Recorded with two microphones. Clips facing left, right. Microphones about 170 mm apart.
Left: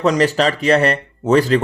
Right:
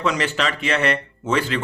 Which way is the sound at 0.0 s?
40° left (ahead or behind).